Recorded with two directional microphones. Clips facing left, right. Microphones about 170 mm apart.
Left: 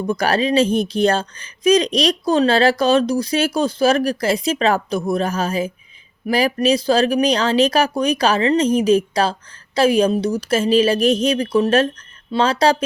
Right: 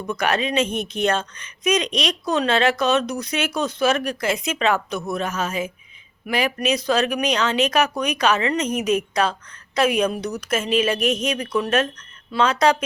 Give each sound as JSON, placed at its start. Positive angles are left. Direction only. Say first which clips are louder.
{"t": 0.0, "sound": "speech", "louder": "left 4 dB", "side_deg": 35}